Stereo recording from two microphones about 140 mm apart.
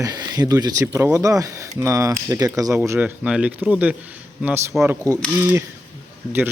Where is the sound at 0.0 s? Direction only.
25° right (ahead or behind).